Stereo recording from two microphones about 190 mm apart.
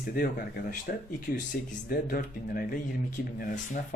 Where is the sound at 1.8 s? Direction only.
50° left (ahead or behind).